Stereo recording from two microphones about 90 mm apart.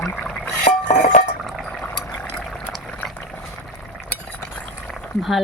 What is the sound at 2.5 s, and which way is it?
Boiling, 10° left (ahead or behind).